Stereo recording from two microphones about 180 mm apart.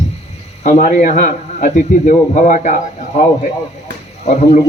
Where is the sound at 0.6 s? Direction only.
40° left (ahead or behind).